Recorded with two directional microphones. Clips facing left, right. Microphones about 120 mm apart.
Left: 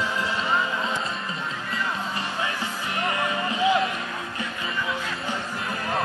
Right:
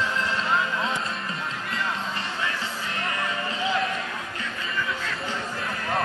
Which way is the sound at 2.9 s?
15° left (ahead or behind).